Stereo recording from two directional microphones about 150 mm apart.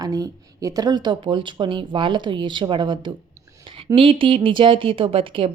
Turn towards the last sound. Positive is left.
turn(degrees=-35)  # may be behind; listen again after turning